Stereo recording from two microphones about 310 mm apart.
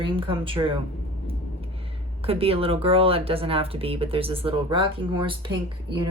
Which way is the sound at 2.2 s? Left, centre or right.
Centre.